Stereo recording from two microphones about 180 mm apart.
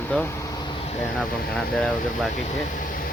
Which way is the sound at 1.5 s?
5° left (ahead or behind).